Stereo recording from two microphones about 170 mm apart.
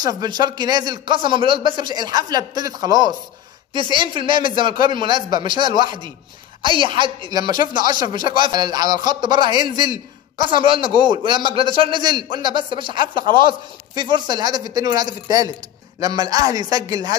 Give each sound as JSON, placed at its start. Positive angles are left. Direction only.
{"t": 0.2, "sound": "a man's voice", "side_deg": -25}
{"t": 13.1, "sound": "speech", "side_deg": 55}
{"t": 13.4, "sound": "a man's voice", "side_deg": -30}